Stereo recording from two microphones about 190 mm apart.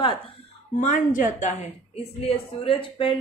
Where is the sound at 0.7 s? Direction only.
40° left (ahead or behind).